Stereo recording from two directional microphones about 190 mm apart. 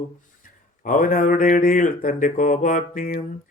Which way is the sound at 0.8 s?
45° left (ahead or behind).